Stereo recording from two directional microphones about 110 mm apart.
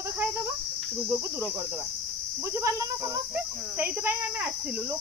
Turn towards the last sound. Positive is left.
turn(degrees=-20)  # may be behind; listen again after turning